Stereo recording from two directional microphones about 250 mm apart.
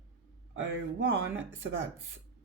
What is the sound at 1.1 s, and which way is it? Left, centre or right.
Speech, right.